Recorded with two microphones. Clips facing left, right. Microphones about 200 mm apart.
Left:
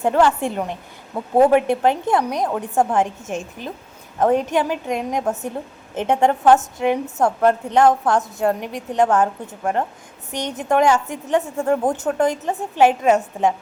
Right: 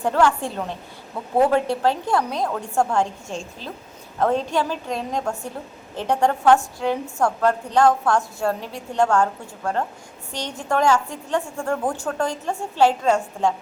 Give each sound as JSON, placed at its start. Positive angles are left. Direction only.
{"t": 0.0, "sound": "a woman's voice", "side_deg": 20}